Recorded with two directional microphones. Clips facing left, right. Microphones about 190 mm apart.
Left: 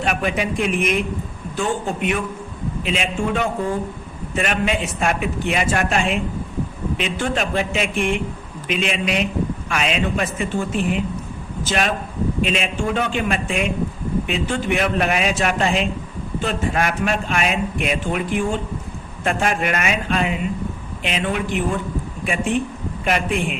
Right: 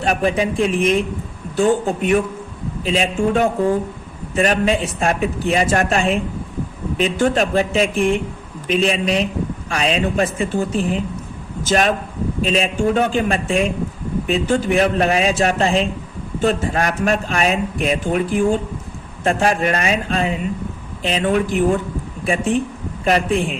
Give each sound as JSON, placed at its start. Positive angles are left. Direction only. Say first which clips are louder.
{"t": 0.0, "sound": "a woman's voice", "louder": "right 4 dB", "side_deg": -35}